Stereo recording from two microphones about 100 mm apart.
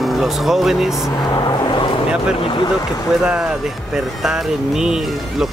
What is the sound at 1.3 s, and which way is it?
Speech, 45° left (ahead or behind).